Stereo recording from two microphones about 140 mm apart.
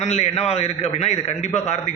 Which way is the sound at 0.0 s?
50° left (ahead or behind).